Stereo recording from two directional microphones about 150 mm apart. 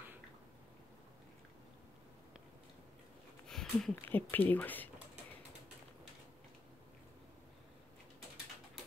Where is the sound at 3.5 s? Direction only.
5° left (ahead or behind).